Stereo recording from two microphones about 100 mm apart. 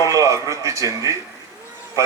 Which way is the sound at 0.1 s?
30° right (ahead or behind).